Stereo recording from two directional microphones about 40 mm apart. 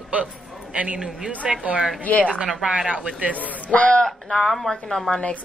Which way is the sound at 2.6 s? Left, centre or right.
Centre.